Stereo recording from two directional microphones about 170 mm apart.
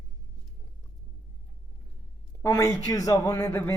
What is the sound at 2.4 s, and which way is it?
A man's voice, 20° left (ahead or behind).